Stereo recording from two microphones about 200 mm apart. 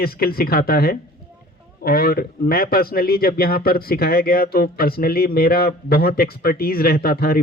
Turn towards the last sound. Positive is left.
turn(degrees=50)  # may be behind; listen again after turning